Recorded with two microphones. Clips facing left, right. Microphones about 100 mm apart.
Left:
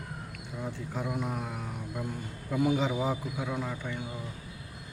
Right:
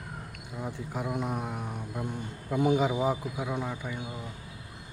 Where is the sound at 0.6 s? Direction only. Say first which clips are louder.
Right 1 dB; 15° right (ahead or behind).